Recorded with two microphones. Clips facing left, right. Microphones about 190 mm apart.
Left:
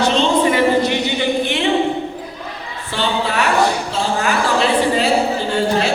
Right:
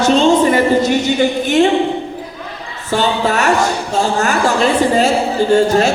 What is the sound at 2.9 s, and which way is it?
A woman's voice, 45° right (ahead or behind).